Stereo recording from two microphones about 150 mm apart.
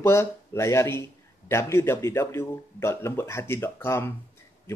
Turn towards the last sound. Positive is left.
turn(degrees=15)  # may be behind; listen again after turning